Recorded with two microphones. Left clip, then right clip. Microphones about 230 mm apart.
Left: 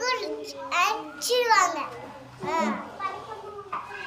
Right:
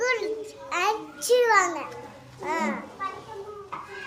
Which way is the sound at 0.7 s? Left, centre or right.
Centre.